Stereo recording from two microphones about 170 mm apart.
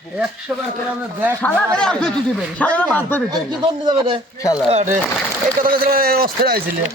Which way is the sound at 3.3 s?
25° right (ahead or behind).